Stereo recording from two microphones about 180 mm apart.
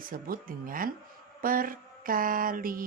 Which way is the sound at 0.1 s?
50° right (ahead or behind).